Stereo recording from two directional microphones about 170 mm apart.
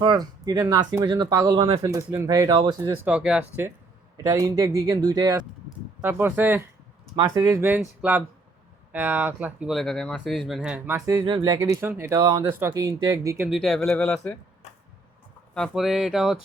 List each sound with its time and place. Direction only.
0.0 s speech: 25° right (ahead or behind)
1.8 s speech: 20° right (ahead or behind)
4.2 s speech: 20° right (ahead or behind)
8.9 s speech: 10° right (ahead or behind)
13.5 s speech: 5° left (ahead or behind)
15.5 s speech: centre (ahead or behind)